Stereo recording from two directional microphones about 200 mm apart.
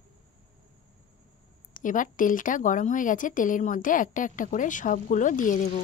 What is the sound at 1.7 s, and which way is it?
A woman's voice, 40° left (ahead or behind).